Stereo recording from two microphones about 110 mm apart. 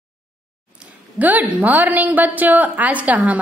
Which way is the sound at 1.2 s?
15° right (ahead or behind).